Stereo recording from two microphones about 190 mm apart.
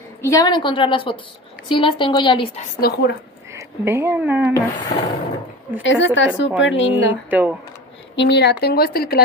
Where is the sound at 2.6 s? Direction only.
55° left (ahead or behind).